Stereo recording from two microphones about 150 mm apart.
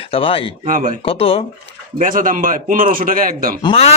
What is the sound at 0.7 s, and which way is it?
Speech, 60° right (ahead or behind).